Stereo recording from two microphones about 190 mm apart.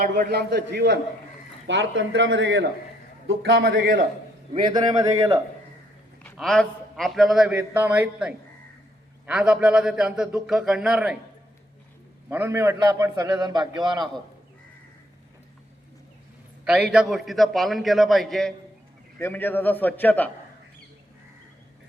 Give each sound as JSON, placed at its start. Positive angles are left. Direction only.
{"t": 0.3, "sound": "a man's voice", "side_deg": -60}
{"t": 1.6, "sound": "a man's voice", "side_deg": -75}
{"t": 4.7, "sound": "a man's voice", "side_deg": -20}
{"t": 6.3, "sound": "a man's voice", "side_deg": 0}
{"t": 12.3, "sound": "a man's voice", "side_deg": -10}
{"t": 16.9, "sound": "a man's voice", "side_deg": -5}